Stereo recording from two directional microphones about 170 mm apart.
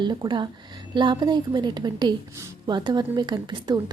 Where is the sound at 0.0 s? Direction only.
25° right (ahead or behind).